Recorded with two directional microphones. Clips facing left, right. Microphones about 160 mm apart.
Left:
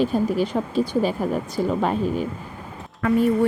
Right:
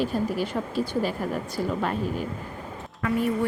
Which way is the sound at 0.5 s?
20° left (ahead or behind).